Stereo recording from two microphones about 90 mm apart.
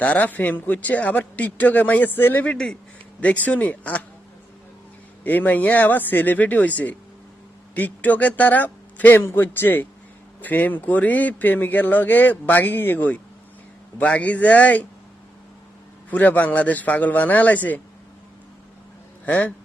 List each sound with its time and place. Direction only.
0.0 s speech: 15° left (ahead or behind)
5.2 s speech: 20° left (ahead or behind)
16.0 s speech: 20° left (ahead or behind)
19.2 s speech: 15° left (ahead or behind)